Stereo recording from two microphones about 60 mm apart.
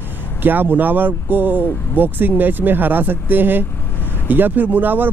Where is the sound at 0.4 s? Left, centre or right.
Right.